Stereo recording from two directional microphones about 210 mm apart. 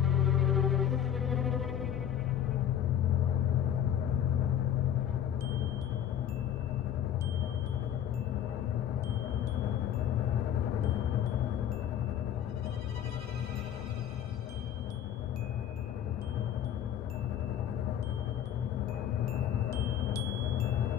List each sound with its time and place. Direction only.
0.0 s music: centre (ahead or behind)